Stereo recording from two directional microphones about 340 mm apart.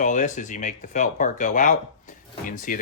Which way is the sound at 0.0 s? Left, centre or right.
Left.